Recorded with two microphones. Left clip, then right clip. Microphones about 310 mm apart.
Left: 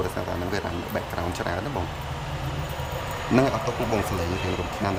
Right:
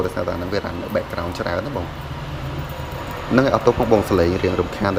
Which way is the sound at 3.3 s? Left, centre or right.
Centre.